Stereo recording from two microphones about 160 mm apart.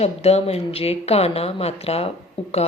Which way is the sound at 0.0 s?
40° left (ahead or behind).